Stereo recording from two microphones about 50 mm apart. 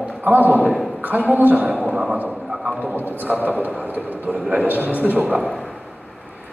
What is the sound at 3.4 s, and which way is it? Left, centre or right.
A man's voice, right.